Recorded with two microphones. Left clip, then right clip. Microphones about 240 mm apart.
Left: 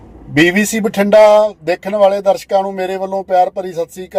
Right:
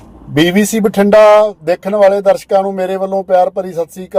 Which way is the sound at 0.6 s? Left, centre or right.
Right.